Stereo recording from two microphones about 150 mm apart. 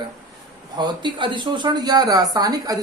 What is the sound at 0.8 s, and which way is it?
A woman's voice, 30° right (ahead or behind).